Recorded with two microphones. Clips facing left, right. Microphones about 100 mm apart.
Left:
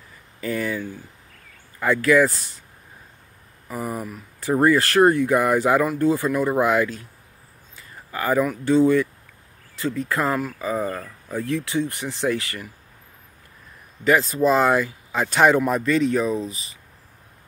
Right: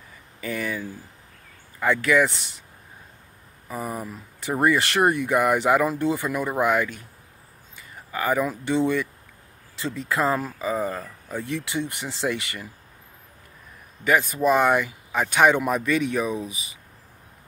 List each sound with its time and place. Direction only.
0.4 s speech: 10° right (ahead or behind)
3.6 s speech: 20° right (ahead or behind)
5.4 s speech: 5° right (ahead or behind)
5.9 s speech: 20° right (ahead or behind)
6.2 s speech: 5° right (ahead or behind)
8.1 s speech: centre (ahead or behind)
10.3 s speech: 20° right (ahead or behind)
10.7 s speech: centre (ahead or behind)
11.2 s speech: 20° right (ahead or behind)
14.0 s speech: 10° right (ahead or behind)